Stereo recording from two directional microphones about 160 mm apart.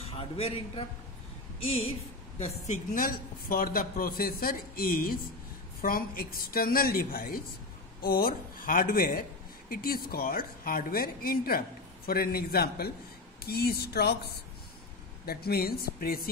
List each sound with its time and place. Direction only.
0.1 s a man's voice: 35° left (ahead or behind); by 14.3 s 85° left
15.2 s speech: 75° left (ahead or behind)